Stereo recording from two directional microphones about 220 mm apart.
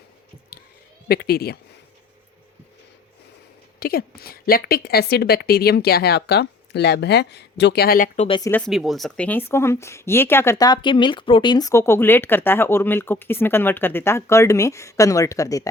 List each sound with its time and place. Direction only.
1.0 s a woman's voice: 45° left (ahead or behind)
3.8 s a woman's voice: 45° left (ahead or behind)
8.4 s speech: 10° left (ahead or behind)